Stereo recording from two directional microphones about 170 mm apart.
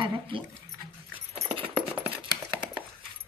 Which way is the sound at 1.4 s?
30° right (ahead or behind).